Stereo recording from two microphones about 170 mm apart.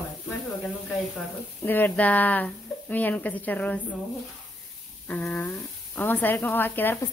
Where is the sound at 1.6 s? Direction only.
10° left (ahead or behind).